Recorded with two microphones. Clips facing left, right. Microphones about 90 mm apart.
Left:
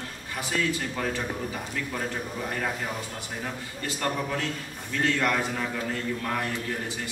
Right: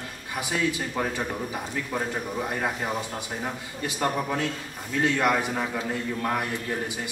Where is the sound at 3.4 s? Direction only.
15° right (ahead or behind).